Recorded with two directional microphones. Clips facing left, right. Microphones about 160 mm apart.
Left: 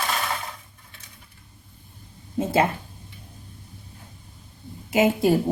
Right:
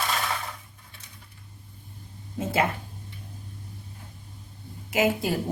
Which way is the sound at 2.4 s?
30° left (ahead or behind).